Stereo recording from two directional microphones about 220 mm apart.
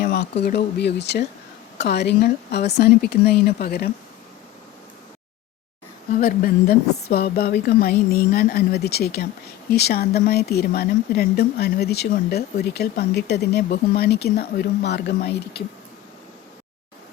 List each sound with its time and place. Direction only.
0.0 s speech: 45° left (ahead or behind)
6.1 s speech: 40° left (ahead or behind)